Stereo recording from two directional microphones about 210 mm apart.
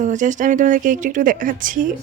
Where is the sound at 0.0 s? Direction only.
35° right (ahead or behind).